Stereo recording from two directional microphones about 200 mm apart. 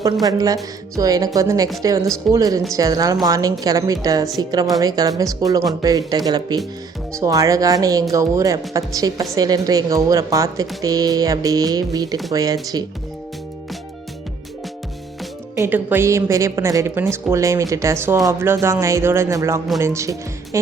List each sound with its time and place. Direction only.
0.0 s a woman's voice: 20° right (ahead or behind)
15.5 s a woman's voice: 10° right (ahead or behind)